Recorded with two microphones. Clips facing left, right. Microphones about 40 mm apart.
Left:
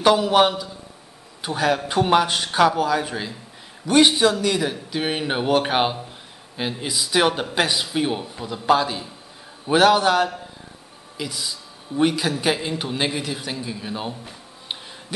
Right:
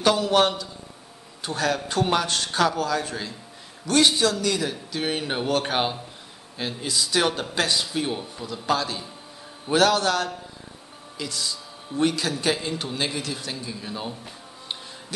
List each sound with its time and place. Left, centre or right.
0.0 s speech: centre